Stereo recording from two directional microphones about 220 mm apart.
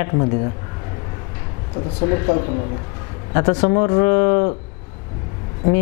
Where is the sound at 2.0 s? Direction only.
30° left (ahead or behind).